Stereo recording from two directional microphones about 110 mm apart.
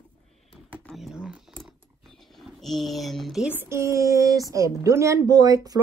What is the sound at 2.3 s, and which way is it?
Speech, centre (ahead or behind).